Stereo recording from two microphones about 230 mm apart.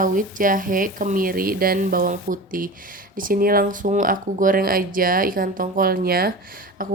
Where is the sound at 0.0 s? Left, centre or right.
Right.